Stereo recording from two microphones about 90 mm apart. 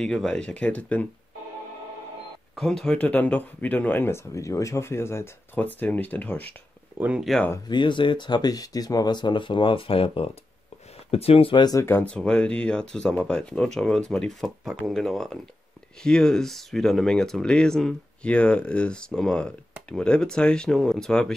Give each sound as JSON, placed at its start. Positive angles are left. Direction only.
{"t": 0.0, "sound": "speech", "side_deg": 5}
{"t": 2.5, "sound": "speech", "side_deg": 5}
{"t": 7.0, "sound": "speech", "side_deg": -10}
{"t": 7.6, "sound": "speech", "side_deg": 60}
{"t": 11.8, "sound": "speech", "side_deg": 25}
{"t": 12.1, "sound": "speech", "side_deg": 10}